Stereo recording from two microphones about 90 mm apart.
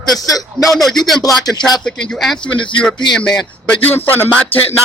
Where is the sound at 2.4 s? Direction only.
60° left (ahead or behind).